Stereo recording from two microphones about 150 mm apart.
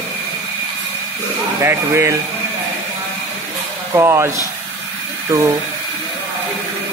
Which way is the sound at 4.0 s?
15° right (ahead or behind).